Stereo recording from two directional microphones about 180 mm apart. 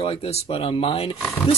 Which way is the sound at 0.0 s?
30° left (ahead or behind).